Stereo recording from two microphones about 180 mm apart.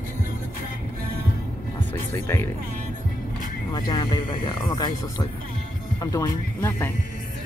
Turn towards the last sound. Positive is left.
turn(degrees=15)  # may be behind; listen again after turning